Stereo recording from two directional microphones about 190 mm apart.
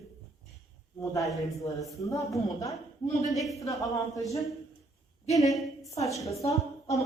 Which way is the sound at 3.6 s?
20° left (ahead or behind).